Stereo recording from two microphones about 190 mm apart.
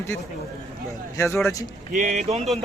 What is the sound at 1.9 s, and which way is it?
Speech, 40° right (ahead or behind).